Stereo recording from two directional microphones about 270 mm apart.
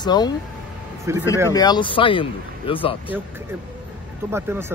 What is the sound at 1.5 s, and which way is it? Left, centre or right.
Speech, centre.